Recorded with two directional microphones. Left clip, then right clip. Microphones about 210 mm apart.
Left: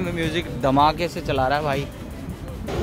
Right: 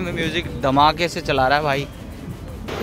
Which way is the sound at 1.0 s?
15° right (ahead or behind).